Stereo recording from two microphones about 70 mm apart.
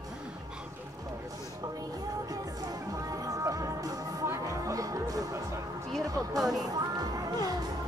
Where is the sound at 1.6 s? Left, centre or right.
Right.